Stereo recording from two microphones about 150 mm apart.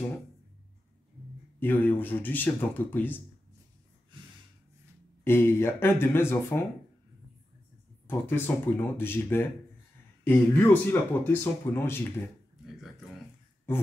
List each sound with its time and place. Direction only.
1.6 s speech: 15° left (ahead or behind)
5.2 s speech: 15° left (ahead or behind)
8.1 s speech: 15° left (ahead or behind)